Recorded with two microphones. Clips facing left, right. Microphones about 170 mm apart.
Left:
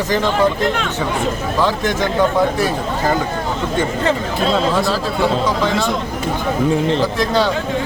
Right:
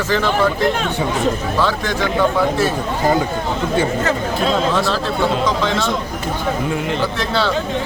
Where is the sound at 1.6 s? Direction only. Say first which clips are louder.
Left 3 dB; 15° left (ahead or behind).